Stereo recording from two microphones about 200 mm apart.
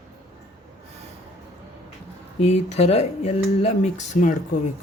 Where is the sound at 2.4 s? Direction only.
35° left (ahead or behind).